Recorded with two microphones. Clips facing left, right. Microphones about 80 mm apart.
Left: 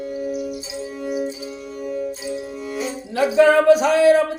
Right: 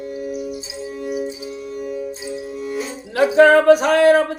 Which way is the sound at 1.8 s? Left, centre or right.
Centre.